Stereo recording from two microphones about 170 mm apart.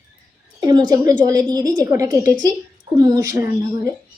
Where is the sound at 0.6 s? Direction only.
20° right (ahead or behind).